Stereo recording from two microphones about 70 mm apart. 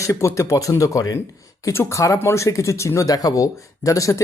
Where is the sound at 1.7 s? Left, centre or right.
Left.